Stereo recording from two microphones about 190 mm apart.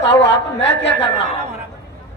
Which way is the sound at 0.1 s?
15° left (ahead or behind).